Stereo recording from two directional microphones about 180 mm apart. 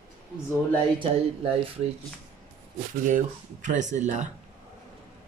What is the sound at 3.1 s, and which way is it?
Speech, 45° right (ahead or behind).